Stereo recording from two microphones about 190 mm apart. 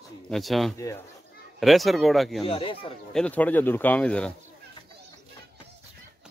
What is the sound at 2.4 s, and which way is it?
Speech, 30° left (ahead or behind).